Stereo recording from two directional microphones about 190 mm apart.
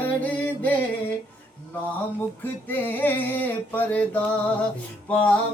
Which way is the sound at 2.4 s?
10° left (ahead or behind).